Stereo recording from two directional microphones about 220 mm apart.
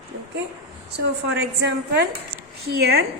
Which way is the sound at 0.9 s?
50° right (ahead or behind).